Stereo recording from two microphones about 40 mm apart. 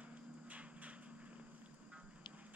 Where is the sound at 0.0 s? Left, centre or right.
Right.